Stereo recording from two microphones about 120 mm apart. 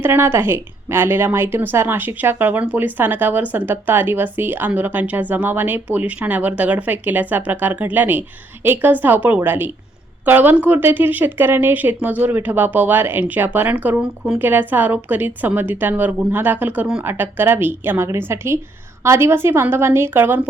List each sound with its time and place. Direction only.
0.0 s a woman's voice: 20° right (ahead or behind)